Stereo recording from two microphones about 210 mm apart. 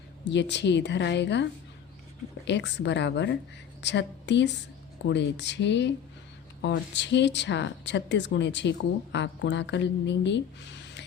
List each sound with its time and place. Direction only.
0.3 s speech: 55° left (ahead or behind)